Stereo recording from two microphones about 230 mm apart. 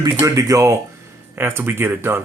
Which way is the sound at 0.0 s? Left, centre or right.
Centre.